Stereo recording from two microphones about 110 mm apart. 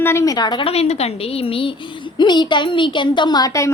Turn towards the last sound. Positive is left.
turn(degrees=30)  # may be behind; listen again after turning